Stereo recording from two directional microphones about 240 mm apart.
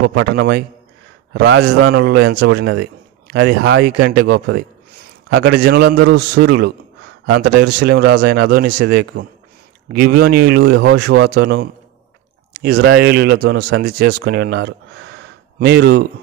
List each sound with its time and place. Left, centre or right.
0.1 s a man's voice: right